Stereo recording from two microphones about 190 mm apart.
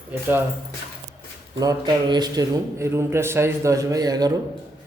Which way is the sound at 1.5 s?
20° right (ahead or behind).